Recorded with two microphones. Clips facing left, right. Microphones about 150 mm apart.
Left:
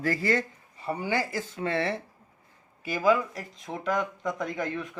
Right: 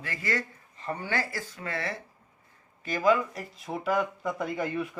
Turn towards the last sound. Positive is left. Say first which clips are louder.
# right 1 dB
turn(degrees=-10)  # may be behind; listen again after turning